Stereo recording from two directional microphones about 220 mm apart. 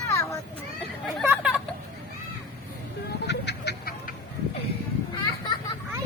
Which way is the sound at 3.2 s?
50° left (ahead or behind).